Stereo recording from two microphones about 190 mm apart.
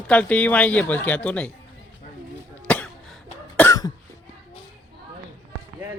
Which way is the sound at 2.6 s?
5° left (ahead or behind).